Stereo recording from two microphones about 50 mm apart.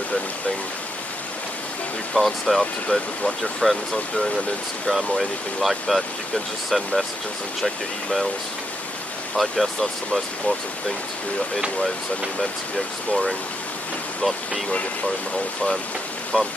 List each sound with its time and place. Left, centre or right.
2.1 s speech: centre
2.9 s speech: left
4.9 s speech: centre
9.3 s speech: centre
12.4 s speech: centre
16.3 s speech: centre